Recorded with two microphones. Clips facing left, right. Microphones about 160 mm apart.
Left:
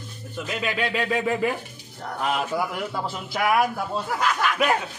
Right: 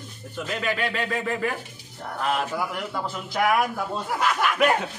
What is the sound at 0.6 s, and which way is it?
A man's voice, 15° left (ahead or behind).